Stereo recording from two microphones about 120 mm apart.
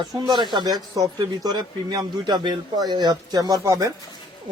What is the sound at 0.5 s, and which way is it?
A man's voice, 35° right (ahead or behind).